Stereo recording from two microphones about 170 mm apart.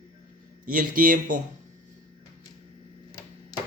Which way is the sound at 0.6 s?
55° right (ahead or behind).